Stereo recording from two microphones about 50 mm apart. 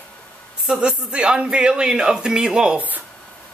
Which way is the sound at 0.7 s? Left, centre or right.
Centre.